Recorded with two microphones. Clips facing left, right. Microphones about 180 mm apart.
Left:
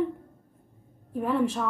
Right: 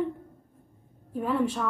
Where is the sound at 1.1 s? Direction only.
Centre (ahead or behind).